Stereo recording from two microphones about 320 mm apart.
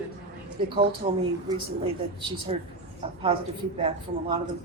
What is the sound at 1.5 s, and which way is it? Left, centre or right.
Speech, centre.